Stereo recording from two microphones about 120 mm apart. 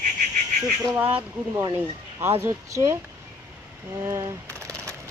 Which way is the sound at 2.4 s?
25° right (ahead or behind).